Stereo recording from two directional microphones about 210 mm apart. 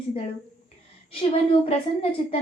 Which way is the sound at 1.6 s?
30° left (ahead or behind).